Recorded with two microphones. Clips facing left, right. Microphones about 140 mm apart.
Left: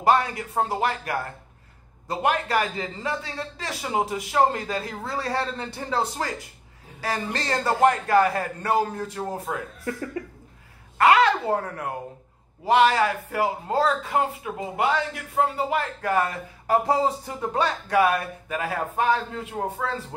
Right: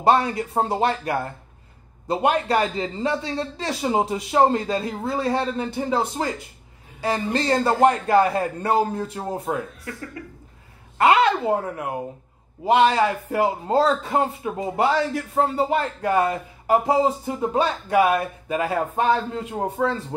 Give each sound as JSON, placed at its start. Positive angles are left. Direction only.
{"t": 0.0, "sound": "speech", "side_deg": -30}
{"t": 11.0, "sound": "speech", "side_deg": -20}